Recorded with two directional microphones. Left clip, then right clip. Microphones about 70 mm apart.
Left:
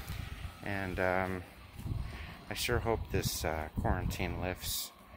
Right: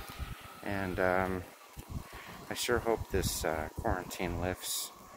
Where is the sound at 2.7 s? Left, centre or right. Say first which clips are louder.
Right 3 dB; centre.